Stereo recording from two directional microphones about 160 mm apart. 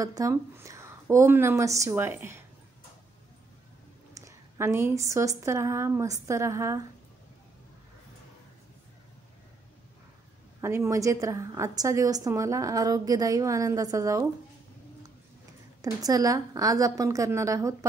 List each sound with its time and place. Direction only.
0.0 s a woman's voice: 20° right (ahead or behind)
4.1 s a woman's voice: 20° right (ahead or behind)
10.6 s a woman's voice: 15° right (ahead or behind)
15.8 s a woman's voice: 20° right (ahead or behind)